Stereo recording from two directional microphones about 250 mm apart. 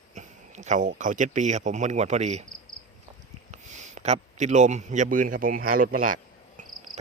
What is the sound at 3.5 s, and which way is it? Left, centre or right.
A man's voice, right.